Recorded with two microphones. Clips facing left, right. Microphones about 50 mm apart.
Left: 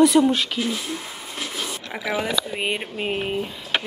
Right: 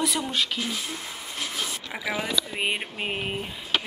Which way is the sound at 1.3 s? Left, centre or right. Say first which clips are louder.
Left 2 dB; centre.